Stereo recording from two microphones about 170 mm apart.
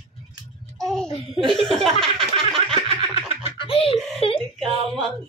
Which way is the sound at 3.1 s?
35° left (ahead or behind).